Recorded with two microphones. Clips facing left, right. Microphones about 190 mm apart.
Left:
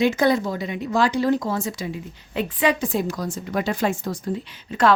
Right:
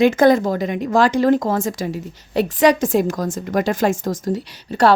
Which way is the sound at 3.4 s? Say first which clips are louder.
Right 5 dB; 45° right (ahead or behind).